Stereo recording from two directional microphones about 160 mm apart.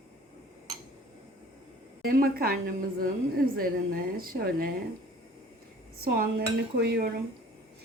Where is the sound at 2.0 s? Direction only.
70° right (ahead or behind).